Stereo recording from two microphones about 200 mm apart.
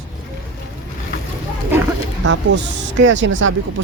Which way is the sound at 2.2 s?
65° right (ahead or behind).